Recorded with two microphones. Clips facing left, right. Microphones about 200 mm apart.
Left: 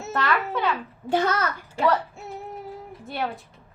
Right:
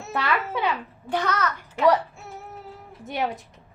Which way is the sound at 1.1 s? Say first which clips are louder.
Left 2 dB; 30° left (ahead or behind).